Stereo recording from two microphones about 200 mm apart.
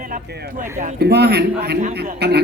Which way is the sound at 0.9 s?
55° right (ahead or behind).